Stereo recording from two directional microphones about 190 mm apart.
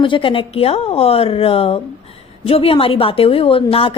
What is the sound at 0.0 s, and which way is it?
A woman's voice, 25° left (ahead or behind).